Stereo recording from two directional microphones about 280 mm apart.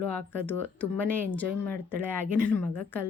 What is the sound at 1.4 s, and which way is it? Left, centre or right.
Speech, right.